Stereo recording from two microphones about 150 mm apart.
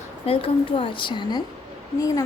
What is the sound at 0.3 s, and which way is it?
A woman's voice, 35° left (ahead or behind).